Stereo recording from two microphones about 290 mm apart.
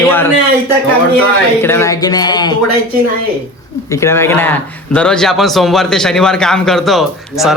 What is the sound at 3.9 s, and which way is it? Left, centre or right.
A man's voice, centre.